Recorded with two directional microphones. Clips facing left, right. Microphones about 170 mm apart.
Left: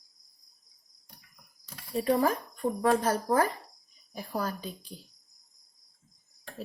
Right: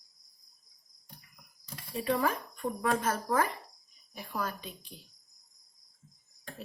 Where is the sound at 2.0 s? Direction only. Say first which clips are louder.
Left 4 dB; 35° left (ahead or behind).